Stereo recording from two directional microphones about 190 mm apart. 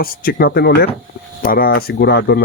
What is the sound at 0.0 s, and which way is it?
Speech, 50° left (ahead or behind).